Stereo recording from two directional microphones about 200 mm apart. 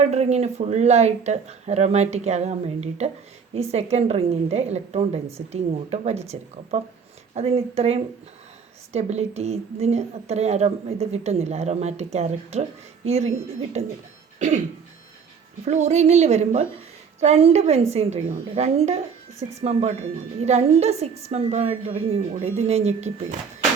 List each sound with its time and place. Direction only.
0.0 s a woman's voice: 35° right (ahead or behind)
14.3 s cough: 35° right (ahead or behind)
15.6 s a woman's voice: 35° right (ahead or behind)